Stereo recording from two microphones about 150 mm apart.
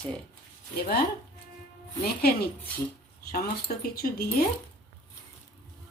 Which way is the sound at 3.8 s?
85° left.